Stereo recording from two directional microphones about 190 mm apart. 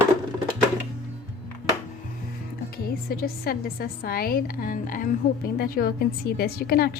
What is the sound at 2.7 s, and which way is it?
A woman's voice, 50° left (ahead or behind).